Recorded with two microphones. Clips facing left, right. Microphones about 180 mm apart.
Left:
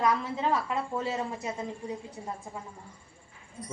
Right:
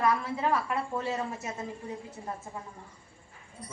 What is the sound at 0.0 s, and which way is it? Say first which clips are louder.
Speech: even; 20° left (ahead or behind).